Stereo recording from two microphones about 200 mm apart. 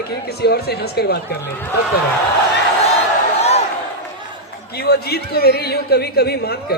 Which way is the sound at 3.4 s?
30° left (ahead or behind).